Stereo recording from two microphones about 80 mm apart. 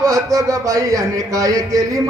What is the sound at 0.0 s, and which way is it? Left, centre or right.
A man's voice, right.